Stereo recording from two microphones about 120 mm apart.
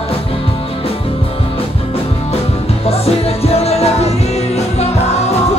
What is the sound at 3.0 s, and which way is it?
Music, 60° left (ahead or behind).